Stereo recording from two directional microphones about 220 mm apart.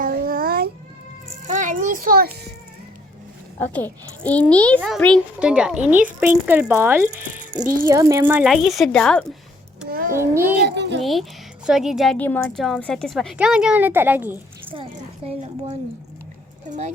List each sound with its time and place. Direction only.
0.0 s cat: 40° right (ahead or behind)
1.5 s a sound: 35° right (ahead or behind)
3.6 s a child's voice: 5° left (ahead or behind); by 7.1 s 10° right (ahead or behind)
7.2 s a child's voice: 35° right (ahead or behind)
7.9 s a woman's voice: 15° right (ahead or behind); by 9.2 s 5° left (ahead or behind)
9.9 s a child's voice: 40° right (ahead or behind)
10.2 s speech: 10° right (ahead or behind)
10.6 s a child's voice: 50° right (ahead or behind)
11.0 s a woman's voice: centre (ahead or behind)
14.7 s a woman's voice: 25° right (ahead or behind)